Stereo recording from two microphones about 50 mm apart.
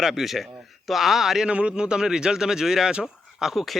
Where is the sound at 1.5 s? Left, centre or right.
Right.